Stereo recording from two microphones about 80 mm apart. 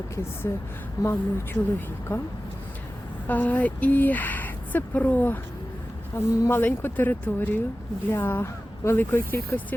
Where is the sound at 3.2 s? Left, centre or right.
Left.